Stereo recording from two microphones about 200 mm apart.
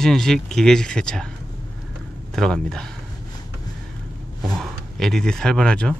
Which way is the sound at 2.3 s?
5° left (ahead or behind).